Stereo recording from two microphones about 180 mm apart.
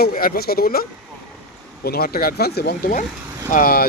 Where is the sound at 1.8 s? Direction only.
60° left (ahead or behind).